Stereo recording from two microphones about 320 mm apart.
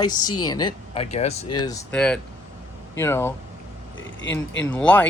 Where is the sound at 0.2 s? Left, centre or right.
Left.